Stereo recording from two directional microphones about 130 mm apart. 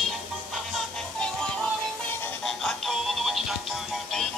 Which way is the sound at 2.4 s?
Centre (ahead or behind).